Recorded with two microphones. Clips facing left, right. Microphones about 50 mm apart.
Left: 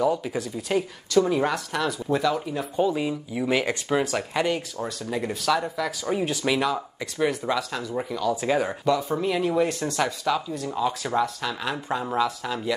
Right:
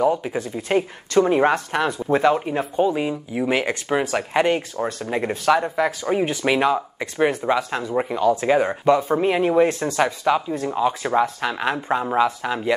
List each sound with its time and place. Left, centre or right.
0.0 s speech: right
2.8 s speech: right